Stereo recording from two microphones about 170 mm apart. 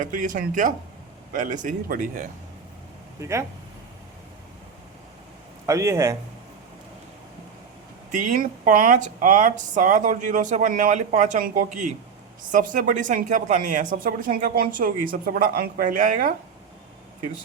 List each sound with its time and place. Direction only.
0.0 s speech: 50° right (ahead or behind)
3.2 s speech: 15° right (ahead or behind)
5.6 s speech: 15° right (ahead or behind)
8.1 s a woman's voice: 45° right (ahead or behind)